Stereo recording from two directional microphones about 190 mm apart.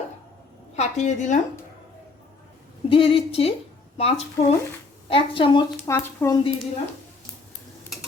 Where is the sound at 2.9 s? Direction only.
30° left (ahead or behind).